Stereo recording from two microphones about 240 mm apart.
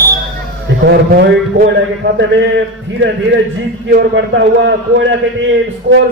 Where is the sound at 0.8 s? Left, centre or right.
Right.